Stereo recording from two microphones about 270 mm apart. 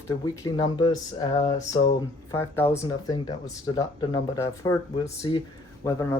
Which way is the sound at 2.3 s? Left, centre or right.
Centre.